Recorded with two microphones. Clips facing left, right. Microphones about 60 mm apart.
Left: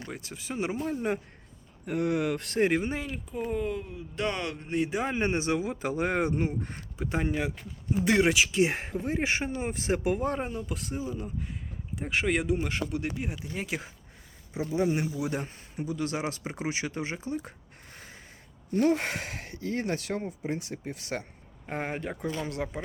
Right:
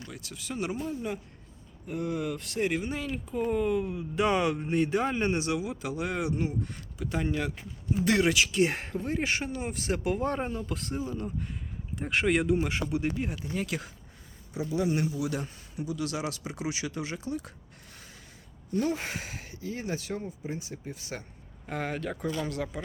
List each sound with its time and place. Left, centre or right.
0.0 s speech: left
1.9 s speech: left
3.3 s speech: centre
4.7 s speech: centre
5.1 s speech: left
10.2 s speech: centre; by 17.5 s left
18.7 s speech: left
21.7 s speech: left